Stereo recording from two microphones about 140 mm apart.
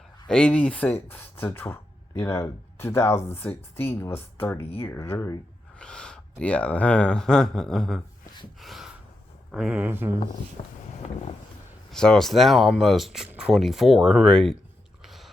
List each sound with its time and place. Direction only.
0.3 s speech: 5° left (ahead or behind)
5.8 s speech: 5° left (ahead or behind)
8.5 s a sound: centre (ahead or behind)
9.5 s speech: 5° right (ahead or behind)
11.9 s speech: 5° left (ahead or behind)
15.0 s a sound: centre (ahead or behind)